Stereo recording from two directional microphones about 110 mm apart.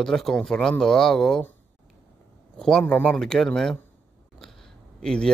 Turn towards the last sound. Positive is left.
turn(degrees=5)  # may be behind; listen again after turning